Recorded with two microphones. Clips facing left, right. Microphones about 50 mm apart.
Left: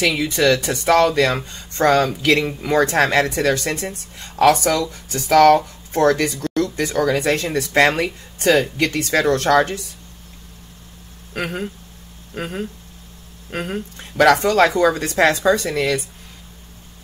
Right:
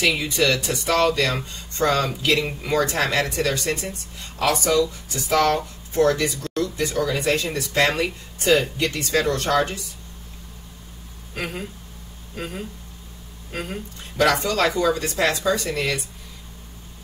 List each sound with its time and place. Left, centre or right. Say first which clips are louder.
0.0 s a woman's voice: left 3 dB; left
11.3 s a woman's voice: left 5 dB; left